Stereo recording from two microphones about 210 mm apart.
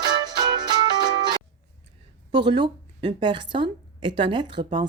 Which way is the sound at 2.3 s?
20° right (ahead or behind).